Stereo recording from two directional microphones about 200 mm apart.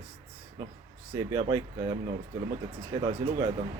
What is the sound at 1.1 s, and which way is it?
Speech, 15° right (ahead or behind).